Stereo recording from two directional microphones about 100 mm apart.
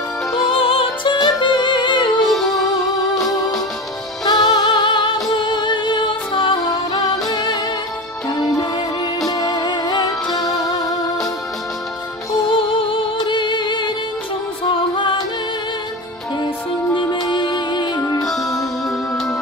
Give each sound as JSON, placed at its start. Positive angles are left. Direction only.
{"t": 0.3, "sound": "music", "side_deg": 60}
{"t": 1.1, "sound": "music", "side_deg": 45}
{"t": 2.2, "sound": "music", "side_deg": 0}
{"t": 4.2, "sound": "music", "side_deg": 45}
{"t": 12.5, "sound": "music", "side_deg": 55}
{"t": 16.9, "sound": "music", "side_deg": 50}
{"t": 18.2, "sound": "music", "side_deg": 0}